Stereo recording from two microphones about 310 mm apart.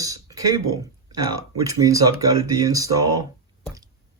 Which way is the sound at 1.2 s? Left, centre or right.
Right.